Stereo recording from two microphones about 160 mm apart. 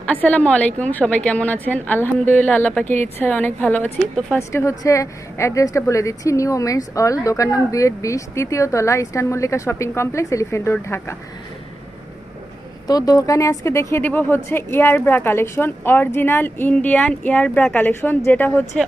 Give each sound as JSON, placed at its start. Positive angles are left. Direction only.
{"t": 0.0, "sound": "a woman's voice", "side_deg": 10}
{"t": 12.9, "sound": "a woman's voice", "side_deg": 25}
{"t": 18.6, "sound": "speech", "side_deg": 0}